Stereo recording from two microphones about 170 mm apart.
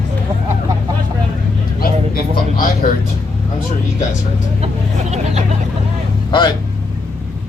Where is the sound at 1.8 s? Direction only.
55° left (ahead or behind).